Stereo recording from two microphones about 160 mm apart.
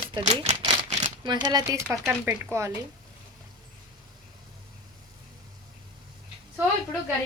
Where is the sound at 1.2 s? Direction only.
25° right (ahead or behind).